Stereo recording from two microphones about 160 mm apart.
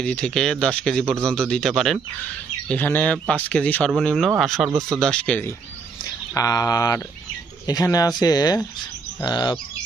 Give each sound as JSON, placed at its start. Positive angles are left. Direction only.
{"t": 0.0, "sound": "speech", "side_deg": 5}
{"t": 6.3, "sound": "speech", "side_deg": 20}